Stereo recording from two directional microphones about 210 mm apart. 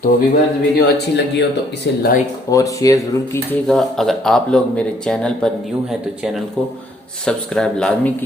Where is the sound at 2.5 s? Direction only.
15° left (ahead or behind).